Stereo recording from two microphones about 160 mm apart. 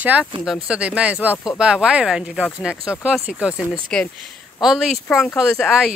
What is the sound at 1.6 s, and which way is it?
Speech, 5° right (ahead or behind).